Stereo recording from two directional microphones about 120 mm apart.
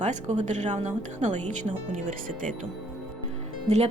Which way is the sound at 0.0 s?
80° right.